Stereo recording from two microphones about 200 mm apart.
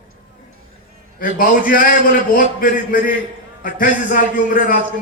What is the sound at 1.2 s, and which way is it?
A man's voice, 45° left (ahead or behind).